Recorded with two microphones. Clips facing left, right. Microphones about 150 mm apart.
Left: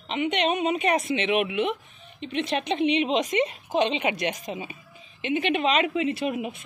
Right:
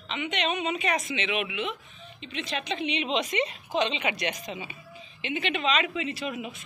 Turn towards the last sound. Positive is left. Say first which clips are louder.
# left 6 dB
turn(degrees=55)  # may be behind; listen again after turning